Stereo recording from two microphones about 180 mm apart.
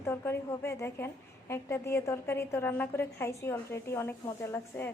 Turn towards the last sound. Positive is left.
turn(degrees=15)  # may be behind; listen again after turning